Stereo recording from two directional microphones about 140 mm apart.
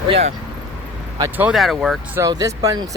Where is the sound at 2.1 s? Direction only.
25° right (ahead or behind).